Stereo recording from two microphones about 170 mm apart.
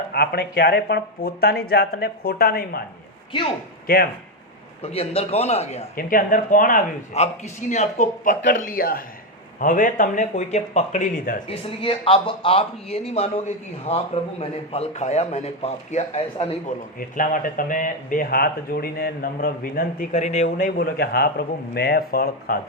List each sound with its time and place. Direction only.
0.1 s speech: 70° left (ahead or behind)
3.8 s speech: 60° left (ahead or behind)
4.8 s speech: 35° left (ahead or behind)
6.0 s speech: 55° left (ahead or behind)
11.4 s speech: 30° left (ahead or behind)
17.0 s speech: 50° left (ahead or behind)
20.1 s speech: 45° left (ahead or behind); by 22.5 s 65° left (ahead or behind)